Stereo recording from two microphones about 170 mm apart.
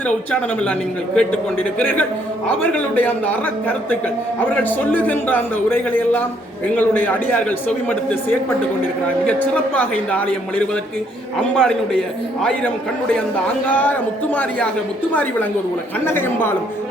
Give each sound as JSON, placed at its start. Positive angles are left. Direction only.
{"t": 0.3, "sound": "a man's voice", "side_deg": 5}
{"t": 15.1, "sound": "a man's voice", "side_deg": 10}